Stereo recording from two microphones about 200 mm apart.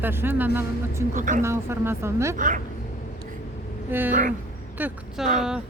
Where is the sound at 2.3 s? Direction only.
40° right (ahead or behind).